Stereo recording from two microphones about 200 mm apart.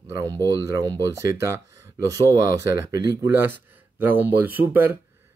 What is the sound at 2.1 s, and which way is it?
Speech, 15° right (ahead or behind).